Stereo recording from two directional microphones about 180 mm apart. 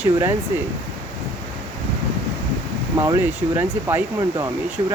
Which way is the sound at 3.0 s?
20° right (ahead or behind).